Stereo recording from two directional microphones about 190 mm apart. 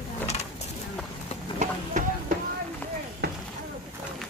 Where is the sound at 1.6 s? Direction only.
45° right (ahead or behind).